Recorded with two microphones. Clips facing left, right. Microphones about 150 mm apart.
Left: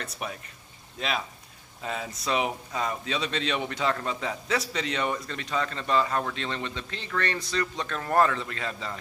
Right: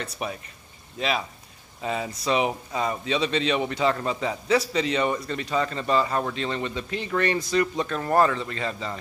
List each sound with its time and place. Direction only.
0.0 s a man's voice: centre (ahead or behind)